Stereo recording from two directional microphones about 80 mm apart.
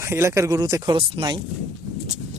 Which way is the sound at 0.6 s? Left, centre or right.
Right.